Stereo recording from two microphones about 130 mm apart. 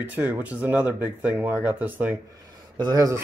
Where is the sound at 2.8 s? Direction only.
30° right (ahead or behind).